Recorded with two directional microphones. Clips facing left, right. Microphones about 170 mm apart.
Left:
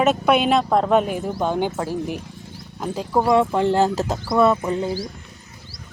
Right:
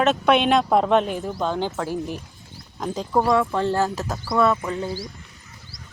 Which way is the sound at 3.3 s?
20° left (ahead or behind).